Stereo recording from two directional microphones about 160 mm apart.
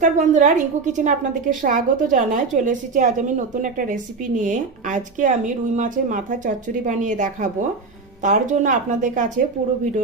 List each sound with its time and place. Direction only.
0.0 s a woman's voice: 50° right (ahead or behind)